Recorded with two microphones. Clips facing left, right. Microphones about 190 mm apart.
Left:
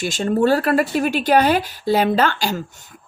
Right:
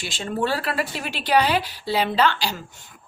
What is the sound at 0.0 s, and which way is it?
Speech, 45° left (ahead or behind).